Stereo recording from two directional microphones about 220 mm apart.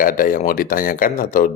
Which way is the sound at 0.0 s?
40° left (ahead or behind).